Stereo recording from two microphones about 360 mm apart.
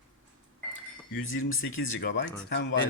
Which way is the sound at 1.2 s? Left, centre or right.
Left.